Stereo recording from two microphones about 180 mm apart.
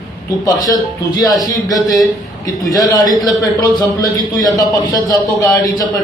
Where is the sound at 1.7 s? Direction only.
Centre (ahead or behind).